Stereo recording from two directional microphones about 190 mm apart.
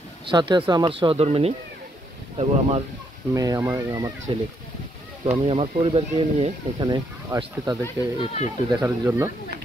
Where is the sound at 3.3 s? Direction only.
15° right (ahead or behind).